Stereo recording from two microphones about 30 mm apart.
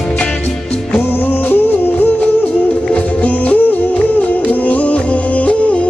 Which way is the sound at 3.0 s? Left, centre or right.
Left.